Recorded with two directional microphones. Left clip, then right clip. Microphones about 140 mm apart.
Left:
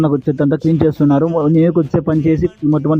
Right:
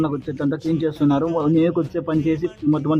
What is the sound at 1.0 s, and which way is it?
Speech, centre (ahead or behind).